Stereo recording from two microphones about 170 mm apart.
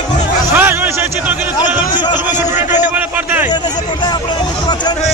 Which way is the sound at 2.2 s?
10° right (ahead or behind).